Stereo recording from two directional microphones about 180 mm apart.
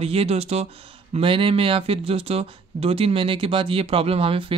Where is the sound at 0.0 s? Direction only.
35° right (ahead or behind).